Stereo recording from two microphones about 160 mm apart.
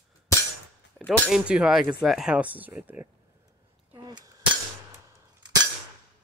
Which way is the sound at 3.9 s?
25° right (ahead or behind).